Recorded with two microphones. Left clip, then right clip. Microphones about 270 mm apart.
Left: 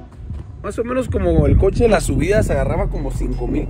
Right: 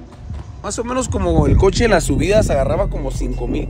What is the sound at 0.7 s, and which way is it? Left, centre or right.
Speech, centre.